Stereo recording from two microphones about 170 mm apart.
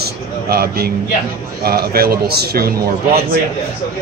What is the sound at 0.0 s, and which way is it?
A man's voice, 65° right (ahead or behind).